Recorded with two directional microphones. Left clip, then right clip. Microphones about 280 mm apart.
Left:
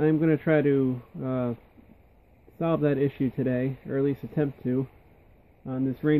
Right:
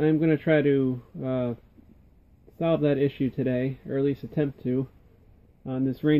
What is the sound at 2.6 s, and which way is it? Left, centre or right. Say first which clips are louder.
A man's voice: right 1 dB; centre.